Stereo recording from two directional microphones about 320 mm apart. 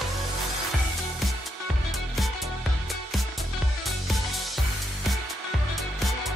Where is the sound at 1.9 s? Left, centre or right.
Centre.